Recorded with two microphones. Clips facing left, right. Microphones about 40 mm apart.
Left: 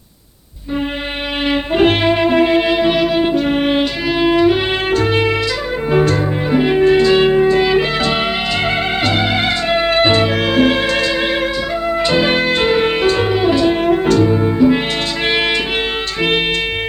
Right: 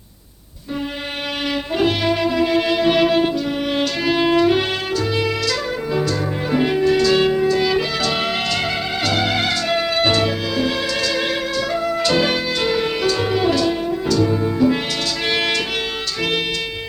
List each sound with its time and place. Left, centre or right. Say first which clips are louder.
1.5 s music: left 6 dB; left
2.9 s music: left 1 dB; centre
3.3 s music: left 7 dB; left
4.0 s music: left 2 dB; centre
4.9 s music: left 6 dB; left
6.5 s music: left 4 dB; centre
6.7 s music: left 5 dB; left
10.6 s music: left 7 dB; left
11.7 s music: left 2 dB; left
12.4 s music: left 6 dB; left
13.3 s music: left 4 dB; left
13.8 s music: left 6 dB; left
14.3 s music: left 5 dB; left